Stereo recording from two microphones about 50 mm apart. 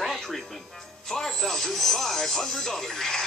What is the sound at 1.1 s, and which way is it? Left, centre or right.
Music, centre.